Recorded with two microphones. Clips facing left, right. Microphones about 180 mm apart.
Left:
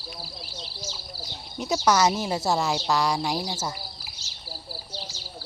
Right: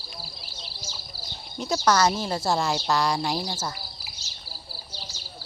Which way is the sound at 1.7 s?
20° left (ahead or behind).